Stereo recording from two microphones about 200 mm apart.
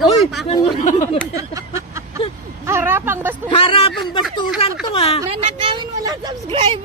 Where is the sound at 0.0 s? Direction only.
Centre (ahead or behind).